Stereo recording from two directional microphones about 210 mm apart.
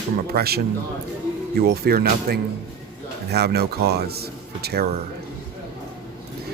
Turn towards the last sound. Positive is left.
turn(degrees=-50)  # may be behind; listen again after turning